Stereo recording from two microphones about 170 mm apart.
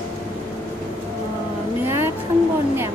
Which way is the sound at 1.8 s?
15° right (ahead or behind).